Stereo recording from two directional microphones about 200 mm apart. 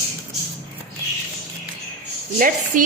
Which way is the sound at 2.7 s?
40° right (ahead or behind).